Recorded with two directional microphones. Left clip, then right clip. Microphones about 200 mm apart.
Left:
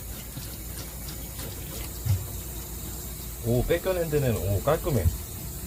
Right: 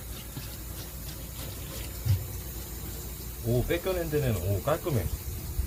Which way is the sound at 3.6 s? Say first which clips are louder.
Left 6 dB; 5° right (ahead or behind).